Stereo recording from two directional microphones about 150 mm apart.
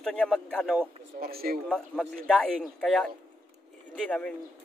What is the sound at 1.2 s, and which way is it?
Speech, 90° right.